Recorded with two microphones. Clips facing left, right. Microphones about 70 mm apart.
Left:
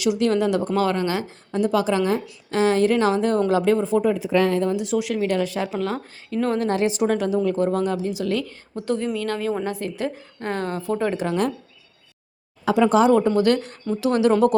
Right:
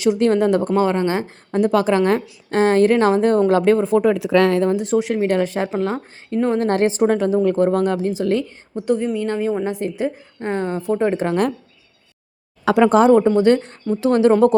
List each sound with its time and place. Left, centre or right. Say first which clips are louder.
0.0 s a woman's voice: right 4 dB; right
0.7 s a woman's voice: right 4 dB; right
4.1 s speech: right 4 dB; right
4.7 s a woman's voice: right 4 dB; right
6.6 s a woman's voice: right 5 dB; right
8.7 s a woman's voice: right 4 dB; centre
11.2 s speech: right 4 dB; right
12.6 s speech: right 4 dB; right
12.9 s a woman's voice: right 4 dB; right